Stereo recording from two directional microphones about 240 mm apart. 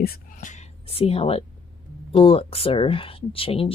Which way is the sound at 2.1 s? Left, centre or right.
Left.